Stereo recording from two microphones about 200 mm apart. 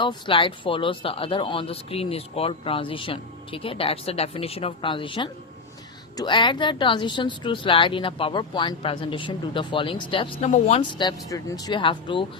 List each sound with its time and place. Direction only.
0.0 s speech: 25° left (ahead or behind)